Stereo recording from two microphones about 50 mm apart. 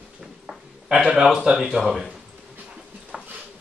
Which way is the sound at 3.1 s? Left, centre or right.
Centre.